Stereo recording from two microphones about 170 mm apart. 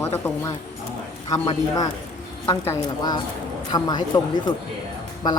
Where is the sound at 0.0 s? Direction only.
15° left (ahead or behind).